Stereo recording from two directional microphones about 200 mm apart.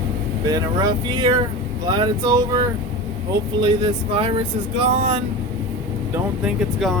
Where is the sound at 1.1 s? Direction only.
20° right (ahead or behind).